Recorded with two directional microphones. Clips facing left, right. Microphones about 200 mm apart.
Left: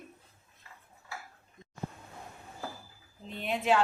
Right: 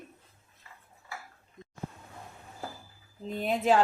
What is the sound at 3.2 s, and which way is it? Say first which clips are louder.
Speech: right 4 dB; 40° right (ahead or behind).